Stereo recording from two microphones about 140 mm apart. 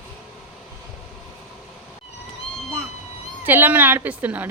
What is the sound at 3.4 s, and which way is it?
A woman's voice, 15° right (ahead or behind).